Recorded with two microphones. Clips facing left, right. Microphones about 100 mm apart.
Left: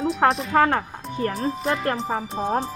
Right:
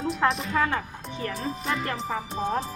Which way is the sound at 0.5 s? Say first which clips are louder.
Left 6 dB; 60° left (ahead or behind).